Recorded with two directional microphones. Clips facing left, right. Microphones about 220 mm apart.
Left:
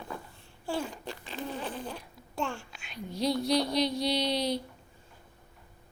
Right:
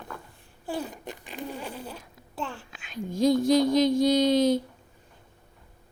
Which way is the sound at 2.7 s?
45° right (ahead or behind).